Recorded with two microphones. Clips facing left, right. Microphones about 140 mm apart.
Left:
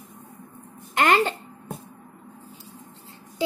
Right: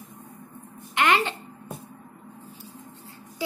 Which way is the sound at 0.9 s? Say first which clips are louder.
Left 2 dB; 40° left (ahead or behind).